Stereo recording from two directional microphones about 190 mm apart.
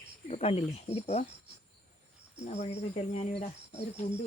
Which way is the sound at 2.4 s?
35° left (ahead or behind).